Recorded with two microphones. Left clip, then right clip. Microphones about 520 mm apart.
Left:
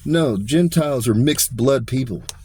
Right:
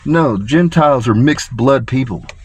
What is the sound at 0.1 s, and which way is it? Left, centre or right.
Speech, centre.